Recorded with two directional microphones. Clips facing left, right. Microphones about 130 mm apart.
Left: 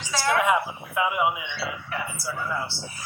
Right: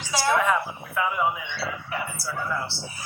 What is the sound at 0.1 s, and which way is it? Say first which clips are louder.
Speech: right 1 dB; 15° right (ahead or behind).